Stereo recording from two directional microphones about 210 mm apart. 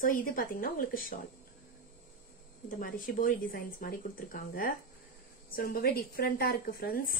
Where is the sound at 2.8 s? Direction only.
40° left (ahead or behind).